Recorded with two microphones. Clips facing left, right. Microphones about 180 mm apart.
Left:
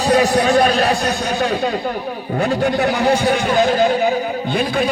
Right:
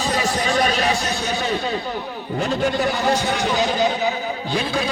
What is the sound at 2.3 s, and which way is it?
A man's voice, 60° left (ahead or behind).